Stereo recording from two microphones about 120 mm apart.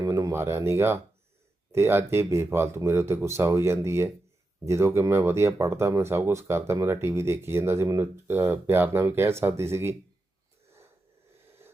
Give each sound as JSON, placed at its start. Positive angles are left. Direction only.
{"t": 0.0, "sound": "speech", "side_deg": -30}